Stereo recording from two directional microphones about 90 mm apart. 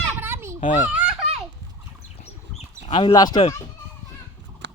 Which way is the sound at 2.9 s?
85° left.